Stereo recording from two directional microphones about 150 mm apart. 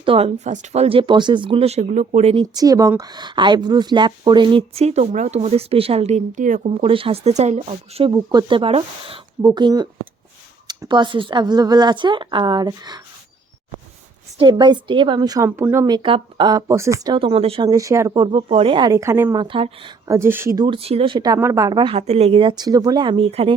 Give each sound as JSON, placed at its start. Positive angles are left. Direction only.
{"t": 0.0, "sound": "a woman's voice", "side_deg": -40}
{"t": 2.3, "sound": "a woman's voice", "side_deg": -30}
{"t": 6.7, "sound": "a woman's voice", "side_deg": -35}
{"t": 8.1, "sound": "a woman's voice", "side_deg": -25}
{"t": 14.3, "sound": "a woman's voice", "side_deg": -30}
{"t": 15.4, "sound": "speech", "side_deg": -15}
{"t": 16.0, "sound": "speech", "side_deg": -35}
{"t": 17.2, "sound": "a woman's voice", "side_deg": -40}
{"t": 17.7, "sound": "speech", "side_deg": -20}
{"t": 19.4, "sound": "a woman's voice", "side_deg": -35}
{"t": 20.1, "sound": "speech", "side_deg": -15}
{"t": 20.7, "sound": "a woman's voice", "side_deg": -40}
{"t": 21.3, "sound": "speech", "side_deg": -20}
{"t": 22.0, "sound": "a woman's voice", "side_deg": -45}